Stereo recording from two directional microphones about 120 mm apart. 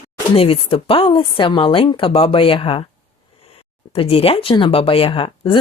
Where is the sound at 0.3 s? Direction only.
50° left (ahead or behind).